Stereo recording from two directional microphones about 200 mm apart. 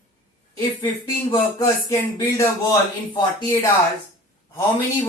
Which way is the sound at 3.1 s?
20° left (ahead or behind).